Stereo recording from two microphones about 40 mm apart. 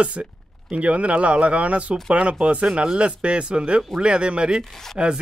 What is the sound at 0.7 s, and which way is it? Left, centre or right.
Speech, right.